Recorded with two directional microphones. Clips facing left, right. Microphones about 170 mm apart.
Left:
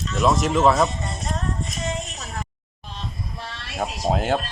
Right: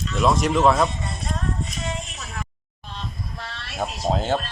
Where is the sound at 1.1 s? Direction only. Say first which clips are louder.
Left 1 dB; 45° left (ahead or behind).